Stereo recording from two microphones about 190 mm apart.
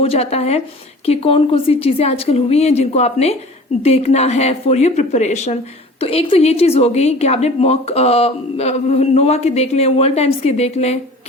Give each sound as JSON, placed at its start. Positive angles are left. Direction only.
{"t": 0.0, "sound": "a woman's voice", "side_deg": 30}